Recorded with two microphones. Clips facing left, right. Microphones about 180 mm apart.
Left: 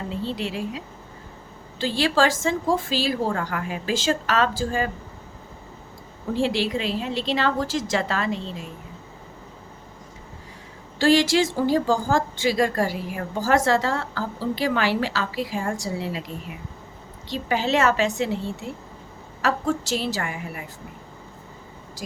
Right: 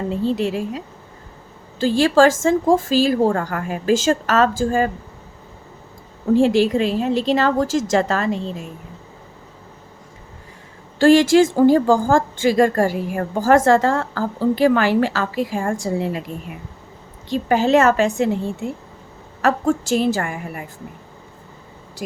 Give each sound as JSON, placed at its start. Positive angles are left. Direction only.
{"t": 0.1, "sound": "speech", "side_deg": -45}
{"t": 1.8, "sound": "speech", "side_deg": -45}
{"t": 6.3, "sound": "speech", "side_deg": -45}
{"t": 10.9, "sound": "speech", "side_deg": -50}
{"t": 17.2, "sound": "speech", "side_deg": -50}